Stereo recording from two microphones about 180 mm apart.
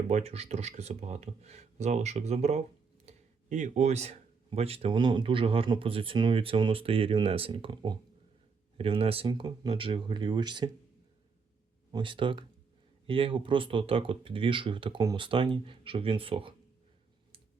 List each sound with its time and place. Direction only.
0.1 s speech: 35° right (ahead or behind)
11.9 s speech: 25° right (ahead or behind)